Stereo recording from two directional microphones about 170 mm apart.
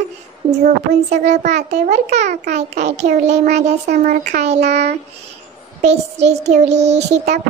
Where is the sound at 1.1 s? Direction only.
45° right (ahead or behind).